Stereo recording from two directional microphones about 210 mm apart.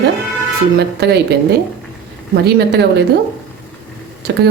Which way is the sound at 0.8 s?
50° right (ahead or behind).